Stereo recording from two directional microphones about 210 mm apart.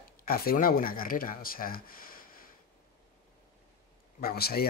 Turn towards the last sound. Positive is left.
turn(degrees=45)  # may be behind; listen again after turning